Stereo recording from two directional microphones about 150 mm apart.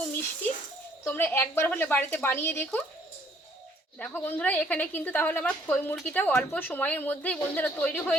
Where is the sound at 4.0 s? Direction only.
10° left (ahead or behind).